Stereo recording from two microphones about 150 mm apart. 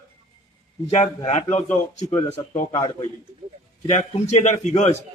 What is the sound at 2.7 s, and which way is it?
Speech, 30° left (ahead or behind).